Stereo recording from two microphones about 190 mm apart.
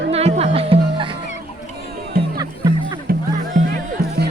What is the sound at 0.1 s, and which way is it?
Speech, 35° right (ahead or behind).